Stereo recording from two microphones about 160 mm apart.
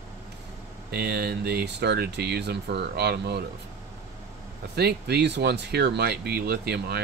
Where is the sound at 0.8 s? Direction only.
80° right.